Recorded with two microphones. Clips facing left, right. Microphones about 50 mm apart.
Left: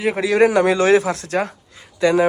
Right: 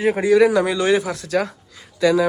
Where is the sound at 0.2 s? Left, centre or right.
Left.